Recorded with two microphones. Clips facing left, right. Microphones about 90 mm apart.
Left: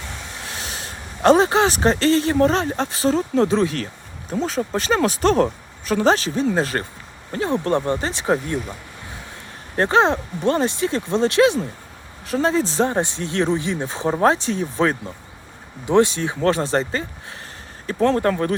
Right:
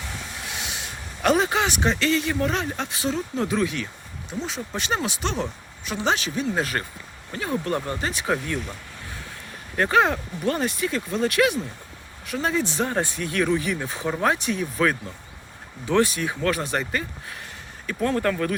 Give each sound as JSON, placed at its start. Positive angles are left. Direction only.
{"t": 0.4, "sound": "speech", "side_deg": 35}
{"t": 9.7, "sound": "speech", "side_deg": 30}
{"t": 18.1, "sound": "speech", "side_deg": 35}